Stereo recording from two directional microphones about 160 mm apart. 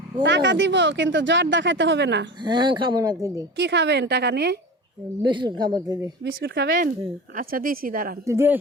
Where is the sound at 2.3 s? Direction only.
30° right (ahead or behind).